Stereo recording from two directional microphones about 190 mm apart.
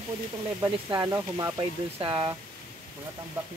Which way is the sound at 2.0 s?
25° right (ahead or behind).